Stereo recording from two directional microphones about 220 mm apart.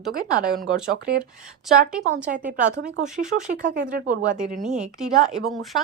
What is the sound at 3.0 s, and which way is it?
Speech, 35° right (ahead or behind).